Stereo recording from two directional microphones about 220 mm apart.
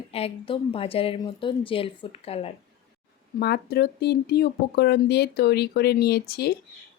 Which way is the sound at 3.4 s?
45° left (ahead or behind).